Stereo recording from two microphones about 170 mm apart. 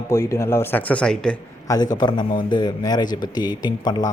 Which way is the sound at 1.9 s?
25° left (ahead or behind).